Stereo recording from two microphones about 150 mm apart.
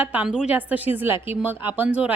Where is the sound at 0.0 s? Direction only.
10° right (ahead or behind).